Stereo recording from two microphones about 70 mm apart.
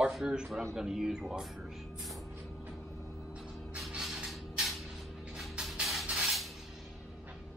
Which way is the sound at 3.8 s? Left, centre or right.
Centre.